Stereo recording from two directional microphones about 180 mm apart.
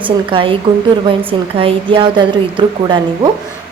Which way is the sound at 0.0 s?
30° right (ahead or behind).